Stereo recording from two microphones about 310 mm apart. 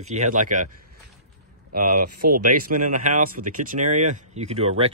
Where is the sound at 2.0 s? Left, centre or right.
Right.